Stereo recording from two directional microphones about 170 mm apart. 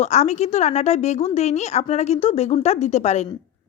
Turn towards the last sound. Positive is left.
turn(degrees=40)  # may be behind; listen again after turning